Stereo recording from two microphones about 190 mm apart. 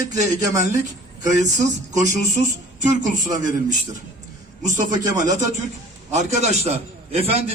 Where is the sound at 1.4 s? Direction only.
40° right (ahead or behind).